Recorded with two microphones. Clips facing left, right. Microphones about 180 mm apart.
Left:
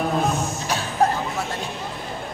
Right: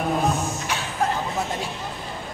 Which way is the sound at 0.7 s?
35° left (ahead or behind).